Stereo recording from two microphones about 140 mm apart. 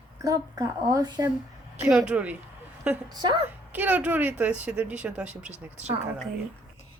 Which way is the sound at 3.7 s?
10° right (ahead or behind).